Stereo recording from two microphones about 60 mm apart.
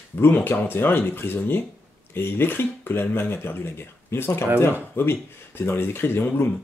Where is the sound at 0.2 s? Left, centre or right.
Left.